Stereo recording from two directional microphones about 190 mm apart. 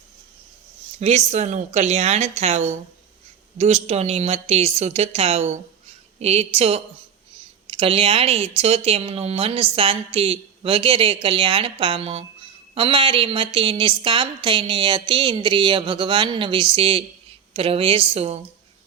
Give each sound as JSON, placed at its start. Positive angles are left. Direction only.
{"t": 0.9, "sound": "a woman's voice", "side_deg": -35}